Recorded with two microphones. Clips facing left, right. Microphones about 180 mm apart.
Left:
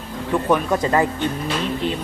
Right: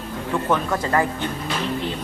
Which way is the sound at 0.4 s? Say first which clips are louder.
Left 4 dB; 15° left (ahead or behind).